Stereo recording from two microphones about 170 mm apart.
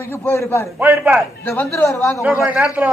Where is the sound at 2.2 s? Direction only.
10° right (ahead or behind).